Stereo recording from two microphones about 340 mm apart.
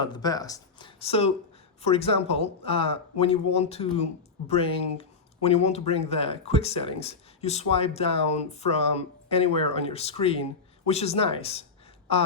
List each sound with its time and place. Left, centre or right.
0.0 s a man's voice: centre